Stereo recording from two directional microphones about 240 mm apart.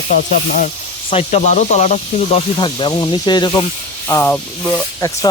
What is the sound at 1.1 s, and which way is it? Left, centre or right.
Speech, left.